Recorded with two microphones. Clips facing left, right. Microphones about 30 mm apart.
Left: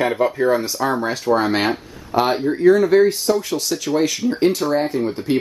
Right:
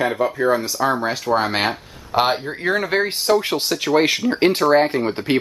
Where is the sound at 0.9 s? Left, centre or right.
Centre.